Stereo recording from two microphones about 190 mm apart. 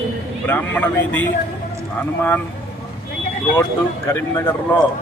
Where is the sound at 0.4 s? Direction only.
10° left (ahead or behind).